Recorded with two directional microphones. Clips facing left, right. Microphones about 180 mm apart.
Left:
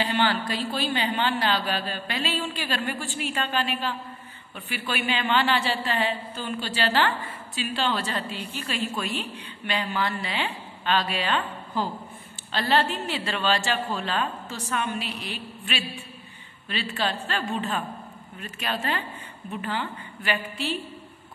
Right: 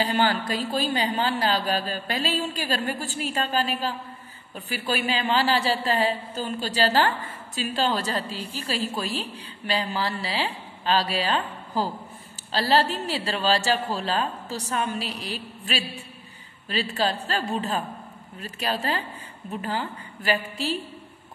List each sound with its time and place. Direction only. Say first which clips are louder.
0.0 s speech: right 1 dB; 40° right (ahead or behind)